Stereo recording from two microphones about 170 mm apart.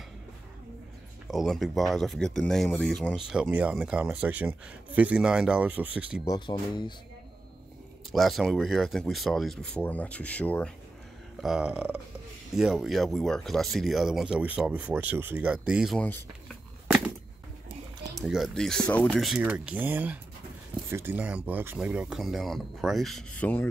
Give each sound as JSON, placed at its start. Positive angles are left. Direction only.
{"t": 1.2, "sound": "speech", "side_deg": 0}
{"t": 6.2, "sound": "speech", "side_deg": 25}
{"t": 8.1, "sound": "speech", "side_deg": 0}
{"t": 11.4, "sound": "speech", "side_deg": -5}
{"t": 18.2, "sound": "speech", "side_deg": 0}